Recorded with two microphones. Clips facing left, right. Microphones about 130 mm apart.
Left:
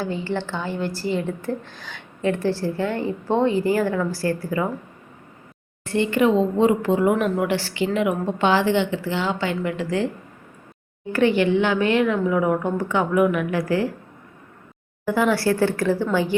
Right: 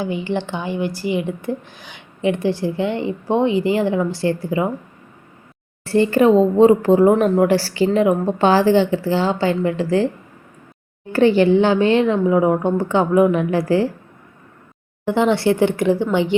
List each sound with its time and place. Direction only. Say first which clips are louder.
0.0 s a woman's voice: right 3 dB; 15° right (ahead or behind)
5.8 s a woman's voice: right 5 dB; 35° right (ahead or behind)
11.1 s speech: right 5 dB; 30° right (ahead or behind)
15.0 s speech: right 3 dB; 25° right (ahead or behind)